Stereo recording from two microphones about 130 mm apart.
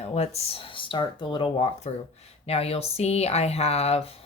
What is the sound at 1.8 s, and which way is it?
Speech, 60° left (ahead or behind).